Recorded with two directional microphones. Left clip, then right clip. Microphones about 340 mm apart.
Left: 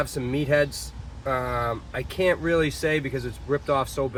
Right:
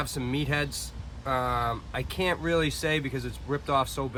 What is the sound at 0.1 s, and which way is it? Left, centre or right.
Speech, centre.